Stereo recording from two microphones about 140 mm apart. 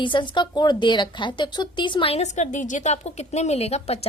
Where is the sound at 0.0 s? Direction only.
35° left (ahead or behind).